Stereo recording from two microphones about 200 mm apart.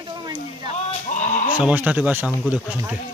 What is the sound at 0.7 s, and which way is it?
Sheep, 35° left (ahead or behind).